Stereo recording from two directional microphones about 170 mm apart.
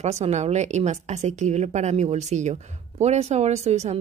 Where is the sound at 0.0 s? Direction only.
40° right (ahead or behind).